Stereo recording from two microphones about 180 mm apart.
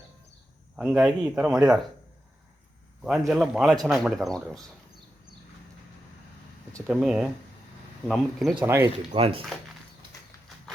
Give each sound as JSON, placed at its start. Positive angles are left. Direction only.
{"t": 0.8, "sound": "a man's voice", "side_deg": -5}
{"t": 3.0, "sound": "a man's voice", "side_deg": 0}
{"t": 6.8, "sound": "a man's voice", "side_deg": -5}
{"t": 8.6, "sound": "speech", "side_deg": -15}
{"t": 9.1, "sound": "speech", "side_deg": -30}